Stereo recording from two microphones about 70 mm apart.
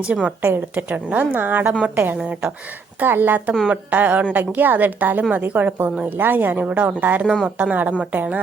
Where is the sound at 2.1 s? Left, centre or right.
Centre.